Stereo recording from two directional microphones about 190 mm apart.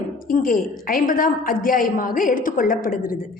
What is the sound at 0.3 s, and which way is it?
A woman's voice, 45° left (ahead or behind).